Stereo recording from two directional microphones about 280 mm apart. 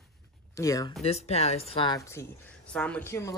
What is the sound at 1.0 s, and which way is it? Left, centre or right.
Speech, left.